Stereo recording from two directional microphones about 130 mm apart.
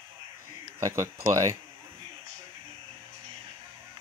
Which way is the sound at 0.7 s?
25° right (ahead or behind).